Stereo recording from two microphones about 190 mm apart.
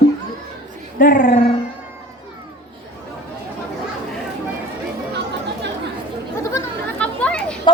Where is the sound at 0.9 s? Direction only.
45° left (ahead or behind).